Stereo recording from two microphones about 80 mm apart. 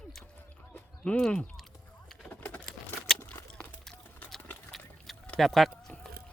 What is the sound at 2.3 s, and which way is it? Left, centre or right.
Pigeon, left.